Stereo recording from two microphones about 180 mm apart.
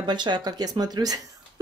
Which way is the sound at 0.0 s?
25° right (ahead or behind).